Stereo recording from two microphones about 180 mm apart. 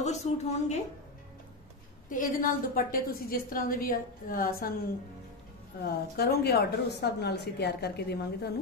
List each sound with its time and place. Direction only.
0.0 s a woman's voice: 40° left (ahead or behind)
2.0 s a woman's voice: 50° left (ahead or behind)
5.9 s a woman's voice: 60° left (ahead or behind)